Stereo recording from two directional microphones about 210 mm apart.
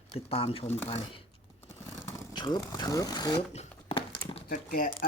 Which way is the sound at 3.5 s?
30° left (ahead or behind).